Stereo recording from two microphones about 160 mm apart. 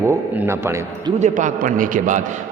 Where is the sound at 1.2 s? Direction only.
50° right (ahead or behind).